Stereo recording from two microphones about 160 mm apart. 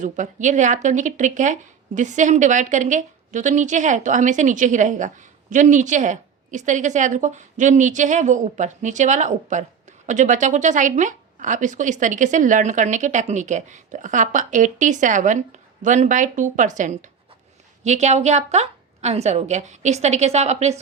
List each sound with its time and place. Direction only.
0.0 s a woman's voice: 50° right (ahead or behind)